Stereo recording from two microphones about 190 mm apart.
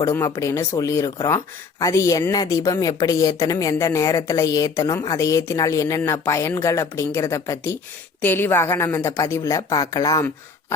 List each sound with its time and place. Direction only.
0.0 s a woman's voice: 15° left (ahead or behind)